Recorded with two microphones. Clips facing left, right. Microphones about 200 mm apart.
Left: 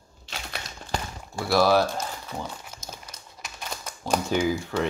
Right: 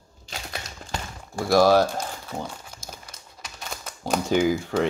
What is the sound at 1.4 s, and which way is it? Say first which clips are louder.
Speech: right 3 dB; 45° right (ahead or behind).